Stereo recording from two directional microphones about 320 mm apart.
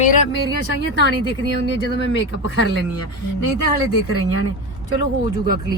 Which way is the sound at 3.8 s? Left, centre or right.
Left.